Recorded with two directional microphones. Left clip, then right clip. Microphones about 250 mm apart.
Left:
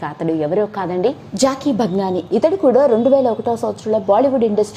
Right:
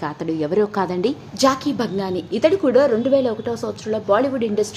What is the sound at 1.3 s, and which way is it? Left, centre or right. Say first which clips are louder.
A woman's voice: right 1 dB; centre.